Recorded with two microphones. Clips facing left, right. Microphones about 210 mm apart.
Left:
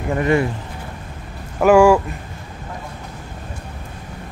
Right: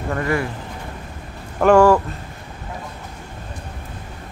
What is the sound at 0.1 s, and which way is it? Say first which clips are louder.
Speech: left 5 dB; 20° left (ahead or behind).